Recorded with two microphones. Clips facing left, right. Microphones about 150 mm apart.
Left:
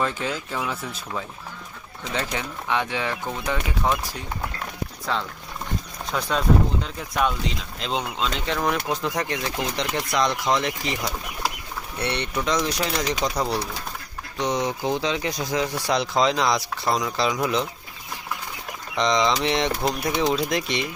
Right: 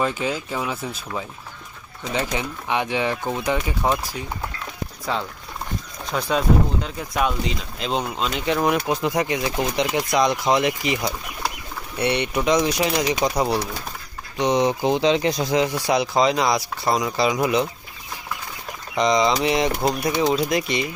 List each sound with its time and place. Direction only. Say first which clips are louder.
0.0 s speech: right 3 dB; 10° right (ahead or behind)
5.1 s speech: right 2 dB; 10° right (ahead or behind)
18.9 s speech: right 3 dB; 5° right (ahead or behind)